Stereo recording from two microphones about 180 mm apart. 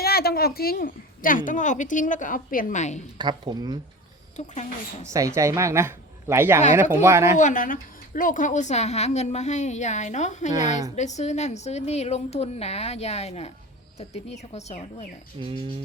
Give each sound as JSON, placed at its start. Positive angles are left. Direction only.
{"t": 0.0, "sound": "a woman's voice", "side_deg": 60}
{"t": 3.2, "sound": "speech", "side_deg": -25}
{"t": 5.0, "sound": "speech", "side_deg": -15}
{"t": 7.3, "sound": "a woman's voice", "side_deg": 45}
{"t": 15.4, "sound": "speech", "side_deg": -25}